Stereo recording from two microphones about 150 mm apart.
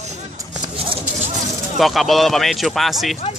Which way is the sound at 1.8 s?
Centre (ahead or behind).